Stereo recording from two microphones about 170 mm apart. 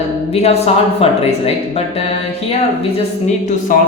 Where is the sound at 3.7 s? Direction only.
55° left (ahead or behind).